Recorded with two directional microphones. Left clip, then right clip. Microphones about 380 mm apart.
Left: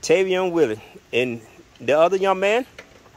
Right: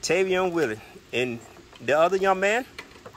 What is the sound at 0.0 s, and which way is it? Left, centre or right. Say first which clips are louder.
Speech: left 4 dB; centre.